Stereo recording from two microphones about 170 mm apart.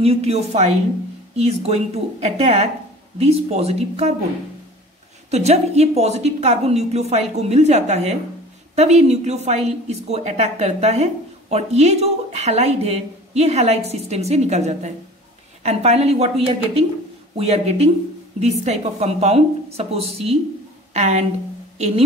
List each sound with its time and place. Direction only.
0.0 s a woman's voice: 35° right (ahead or behind)
5.3 s a woman's voice: 40° right (ahead or behind)